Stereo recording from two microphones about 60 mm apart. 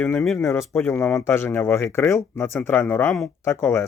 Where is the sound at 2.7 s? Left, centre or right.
Left.